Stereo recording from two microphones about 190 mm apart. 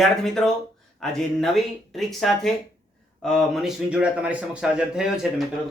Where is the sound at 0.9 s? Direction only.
Centre (ahead or behind).